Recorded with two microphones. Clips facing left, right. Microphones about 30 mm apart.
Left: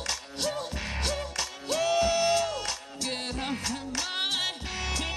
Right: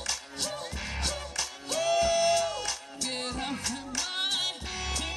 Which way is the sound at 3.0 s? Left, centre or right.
Centre.